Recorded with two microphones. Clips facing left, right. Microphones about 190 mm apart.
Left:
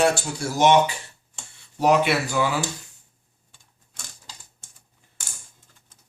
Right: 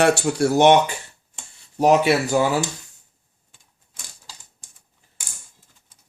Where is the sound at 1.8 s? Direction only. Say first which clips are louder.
Right 3 dB; 45° right (ahead or behind).